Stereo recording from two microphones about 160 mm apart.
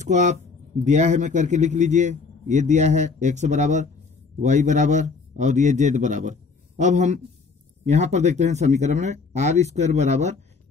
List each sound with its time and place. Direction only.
0.0 s a man's voice: 50° right (ahead or behind)